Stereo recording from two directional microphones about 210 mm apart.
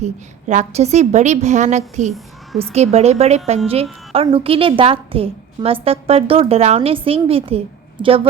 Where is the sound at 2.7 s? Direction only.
30° right (ahead or behind).